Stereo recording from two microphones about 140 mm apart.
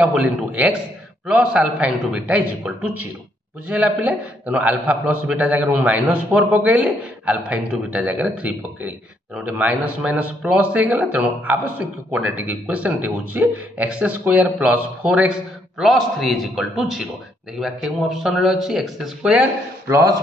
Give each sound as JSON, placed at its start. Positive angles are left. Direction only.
{"t": 0.0, "sound": "a man's voice", "side_deg": -10}
{"t": 19.9, "sound": "a man's voice", "side_deg": -25}